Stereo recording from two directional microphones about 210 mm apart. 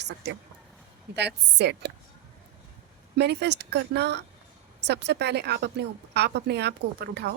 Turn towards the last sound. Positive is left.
turn(degrees=-50)  # may be behind; listen again after turning